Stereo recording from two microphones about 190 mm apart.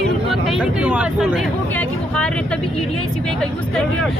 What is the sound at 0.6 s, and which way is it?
Speech, 5° right (ahead or behind).